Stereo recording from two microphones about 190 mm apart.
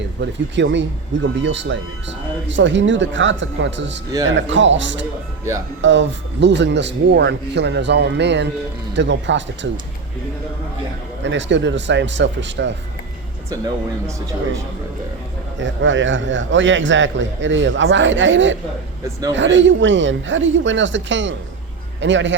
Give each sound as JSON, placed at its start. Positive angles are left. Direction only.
{"t": 0.2, "sound": "speech", "side_deg": -70}
{"t": 11.2, "sound": "speech", "side_deg": -70}
{"t": 15.5, "sound": "speech", "side_deg": -75}